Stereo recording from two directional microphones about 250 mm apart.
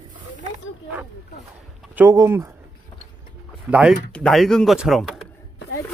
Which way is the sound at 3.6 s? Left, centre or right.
Centre.